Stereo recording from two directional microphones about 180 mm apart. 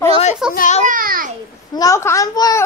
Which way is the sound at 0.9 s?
50° right (ahead or behind).